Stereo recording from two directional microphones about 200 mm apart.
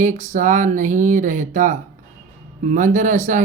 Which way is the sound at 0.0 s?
40° right (ahead or behind).